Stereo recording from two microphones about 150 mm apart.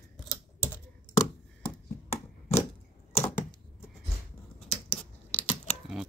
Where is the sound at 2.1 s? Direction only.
45° left (ahead or behind).